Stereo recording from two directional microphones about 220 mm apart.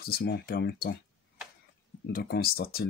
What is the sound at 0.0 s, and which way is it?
Speech, 45° left (ahead or behind).